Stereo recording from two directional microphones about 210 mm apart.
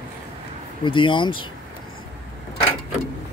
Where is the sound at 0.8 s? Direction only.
25° left (ahead or behind).